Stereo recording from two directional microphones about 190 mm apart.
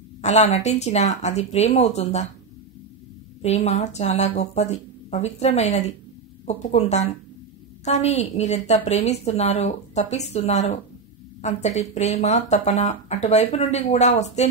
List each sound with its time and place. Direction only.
0.2 s speech: 35° left (ahead or behind)
3.4 s speech: 35° left (ahead or behind)